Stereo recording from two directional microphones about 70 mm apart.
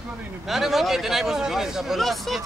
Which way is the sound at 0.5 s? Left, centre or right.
Centre.